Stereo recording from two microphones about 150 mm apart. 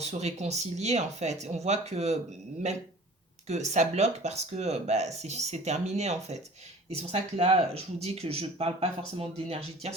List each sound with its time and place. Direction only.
0.0 s speech: 45° right (ahead or behind)
3.4 s speech: 50° right (ahead or behind)